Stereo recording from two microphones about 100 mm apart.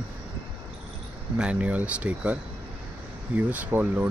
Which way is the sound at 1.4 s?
10° right (ahead or behind).